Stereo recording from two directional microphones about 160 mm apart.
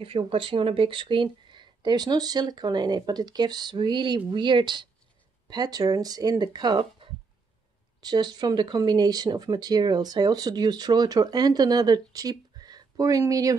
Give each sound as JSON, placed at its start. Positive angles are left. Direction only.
{"t": 0.0, "sound": "speech", "side_deg": -35}